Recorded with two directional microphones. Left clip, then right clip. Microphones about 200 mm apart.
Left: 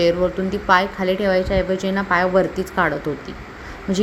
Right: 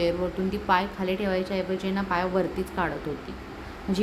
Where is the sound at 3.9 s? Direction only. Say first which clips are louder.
Left 7 dB; 15° left (ahead or behind).